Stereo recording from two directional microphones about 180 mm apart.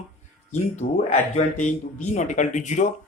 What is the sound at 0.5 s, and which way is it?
Speech, 40° left (ahead or behind).